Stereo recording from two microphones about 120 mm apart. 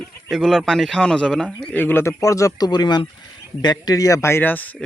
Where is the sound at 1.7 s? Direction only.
15° left (ahead or behind).